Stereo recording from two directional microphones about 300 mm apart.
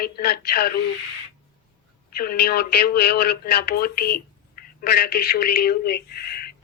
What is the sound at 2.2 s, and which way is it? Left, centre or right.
Speech, left.